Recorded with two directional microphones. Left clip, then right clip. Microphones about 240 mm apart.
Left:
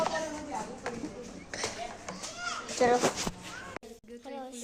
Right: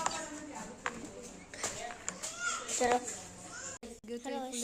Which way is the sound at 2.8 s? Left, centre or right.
Centre.